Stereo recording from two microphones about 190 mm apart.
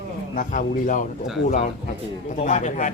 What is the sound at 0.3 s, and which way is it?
A man's voice, 45° left (ahead or behind).